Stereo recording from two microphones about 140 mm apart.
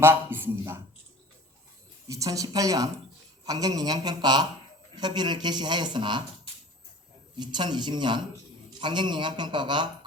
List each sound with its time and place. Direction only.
0.0 s a sound: 15° right (ahead or behind)
2.0 s a man's voice: 25° right (ahead or behind)
7.3 s speech: 30° right (ahead or behind)